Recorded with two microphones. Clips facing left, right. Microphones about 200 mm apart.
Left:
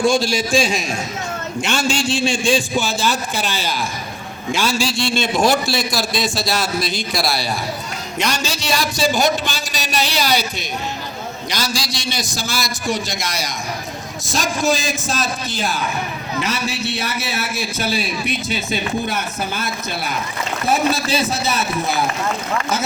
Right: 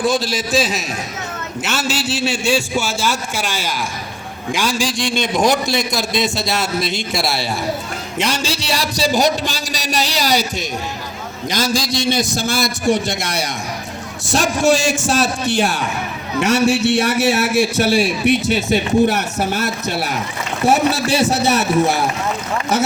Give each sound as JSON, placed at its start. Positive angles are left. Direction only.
{"t": 0.0, "sound": "a man's voice", "side_deg": 0}
{"t": 11.5, "sound": "a man's voice", "side_deg": -50}
{"t": 14.3, "sound": "a man's voice", "side_deg": -70}